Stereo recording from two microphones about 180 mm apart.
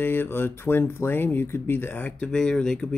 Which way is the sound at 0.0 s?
10° left (ahead or behind).